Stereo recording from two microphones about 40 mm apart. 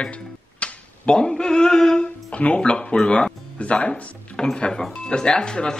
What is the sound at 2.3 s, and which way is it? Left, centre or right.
Cutlery, left.